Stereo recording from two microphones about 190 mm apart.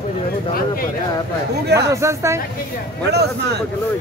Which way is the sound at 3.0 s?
60° right (ahead or behind).